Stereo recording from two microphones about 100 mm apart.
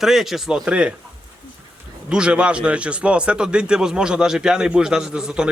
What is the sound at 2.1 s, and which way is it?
A man's voice, 10° right (ahead or behind).